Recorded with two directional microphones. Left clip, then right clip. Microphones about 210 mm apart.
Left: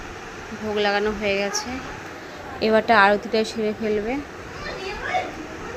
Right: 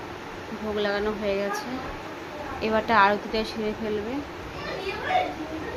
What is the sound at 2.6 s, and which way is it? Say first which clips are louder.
A woman's voice: left 4 dB; 15° left (ahead or behind).